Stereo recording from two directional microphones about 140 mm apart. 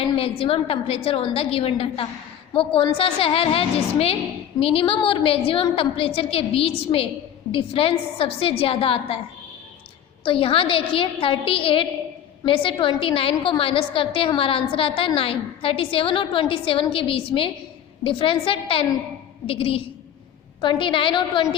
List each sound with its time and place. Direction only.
0.2 s a woman's voice: 45° left (ahead or behind)
10.2 s a woman's voice: 40° left (ahead or behind)